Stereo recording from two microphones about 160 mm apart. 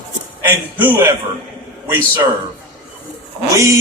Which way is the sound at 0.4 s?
15° right (ahead or behind).